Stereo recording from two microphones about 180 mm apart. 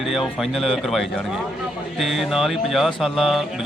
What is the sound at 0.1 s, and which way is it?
Mantra, centre (ahead or behind).